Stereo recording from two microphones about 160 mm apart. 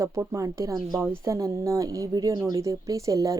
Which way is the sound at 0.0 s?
20° right (ahead or behind).